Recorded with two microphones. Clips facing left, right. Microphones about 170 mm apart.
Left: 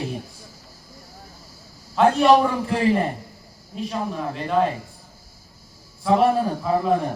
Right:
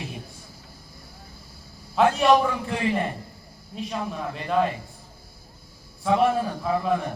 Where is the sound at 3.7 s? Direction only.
Centre (ahead or behind).